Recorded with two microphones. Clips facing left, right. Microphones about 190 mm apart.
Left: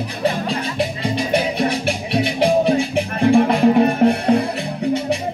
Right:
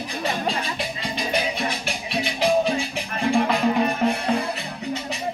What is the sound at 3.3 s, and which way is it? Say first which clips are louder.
Music: left 7 dB; 50° left (ahead or behind).